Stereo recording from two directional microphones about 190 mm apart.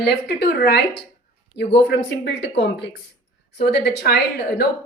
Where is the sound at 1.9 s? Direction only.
75° left (ahead or behind).